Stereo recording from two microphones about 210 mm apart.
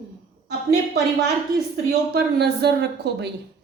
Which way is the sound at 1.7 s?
50° right (ahead or behind).